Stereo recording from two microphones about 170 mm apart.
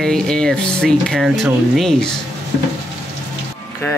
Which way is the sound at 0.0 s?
5° left (ahead or behind).